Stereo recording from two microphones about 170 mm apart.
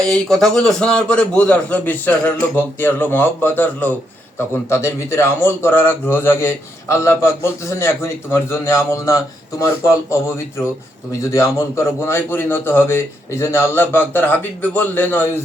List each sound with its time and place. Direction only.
0.1 s a man's voice: centre (ahead or behind)